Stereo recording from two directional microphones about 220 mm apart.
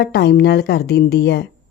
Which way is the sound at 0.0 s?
50° left (ahead or behind).